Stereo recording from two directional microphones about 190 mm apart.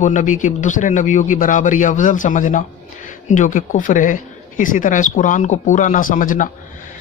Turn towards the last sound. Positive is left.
turn(degrees=45)  # may be behind; listen again after turning